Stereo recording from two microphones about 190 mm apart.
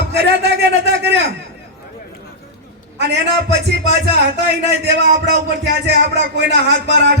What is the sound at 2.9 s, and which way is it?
Speech, 65° right (ahead or behind).